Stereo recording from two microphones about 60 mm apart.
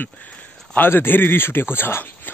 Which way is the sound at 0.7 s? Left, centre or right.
Left.